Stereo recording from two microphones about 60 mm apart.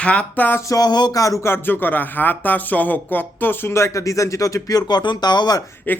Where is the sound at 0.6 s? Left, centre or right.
Left.